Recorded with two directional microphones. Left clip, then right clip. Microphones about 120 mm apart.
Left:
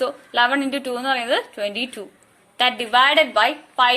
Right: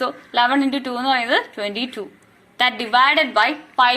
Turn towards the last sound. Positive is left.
turn(degrees=60)  # may be behind; listen again after turning